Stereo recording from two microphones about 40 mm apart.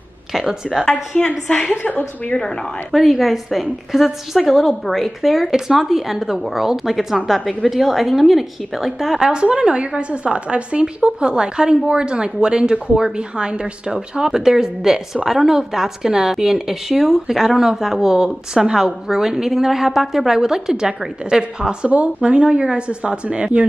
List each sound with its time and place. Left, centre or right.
0.3 s speech: centre
1.1 s a woman's voice: centre
1.7 s a woman's voice: left
2.3 s a woman's voice: centre
2.9 s a woman's voice: centre
9.2 s a woman's voice: right
21.8 s a woman's voice: right